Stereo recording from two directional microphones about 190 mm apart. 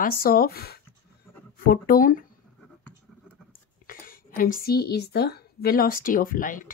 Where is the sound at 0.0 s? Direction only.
50° left (ahead or behind).